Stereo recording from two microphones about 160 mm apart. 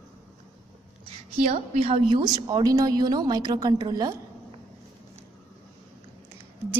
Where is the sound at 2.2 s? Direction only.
25° right (ahead or behind).